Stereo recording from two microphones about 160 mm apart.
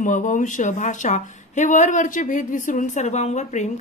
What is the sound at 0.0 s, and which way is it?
A woman's voice, 50° left (ahead or behind).